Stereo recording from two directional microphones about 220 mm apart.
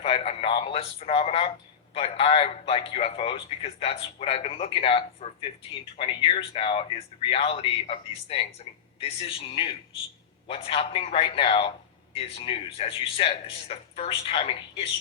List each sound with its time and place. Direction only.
0.0 s a man's voice: 25° left (ahead or behind)